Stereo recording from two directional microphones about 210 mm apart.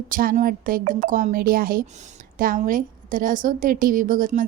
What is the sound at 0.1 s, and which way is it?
A woman's voice, 40° right (ahead or behind).